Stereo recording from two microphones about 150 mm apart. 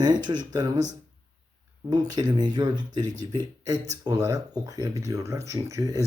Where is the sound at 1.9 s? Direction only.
25° right (ahead or behind).